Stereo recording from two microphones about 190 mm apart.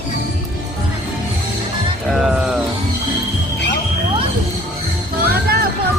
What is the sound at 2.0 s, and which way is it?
Speech, centre (ahead or behind).